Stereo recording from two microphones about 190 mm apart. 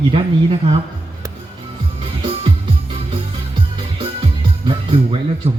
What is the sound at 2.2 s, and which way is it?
Music, 30° right (ahead or behind).